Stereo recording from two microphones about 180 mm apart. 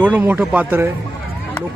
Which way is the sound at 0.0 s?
10° right (ahead or behind).